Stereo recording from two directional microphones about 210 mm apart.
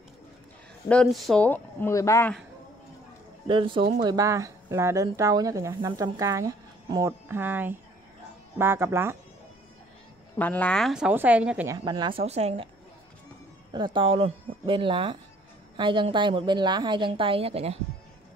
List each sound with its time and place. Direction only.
0.8 s speech: 5° left (ahead or behind)
3.4 s a woman's voice: 25° right (ahead or behind)
10.3 s speech: 10° left (ahead or behind); by 12.6 s 30° right (ahead or behind)
13.7 s a woman's voice: 20° right (ahead or behind)